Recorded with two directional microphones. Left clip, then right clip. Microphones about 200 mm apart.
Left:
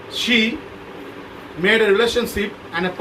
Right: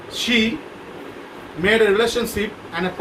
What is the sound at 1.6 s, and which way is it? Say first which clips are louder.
Speech: left 1 dB; 15° right (ahead or behind).